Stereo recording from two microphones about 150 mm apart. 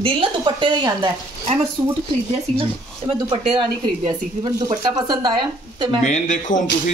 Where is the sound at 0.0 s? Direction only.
35° right (ahead or behind).